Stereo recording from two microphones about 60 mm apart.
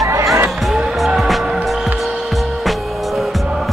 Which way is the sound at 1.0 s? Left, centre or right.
Centre.